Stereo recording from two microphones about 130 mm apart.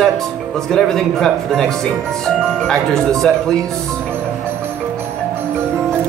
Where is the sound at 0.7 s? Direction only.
5° left (ahead or behind).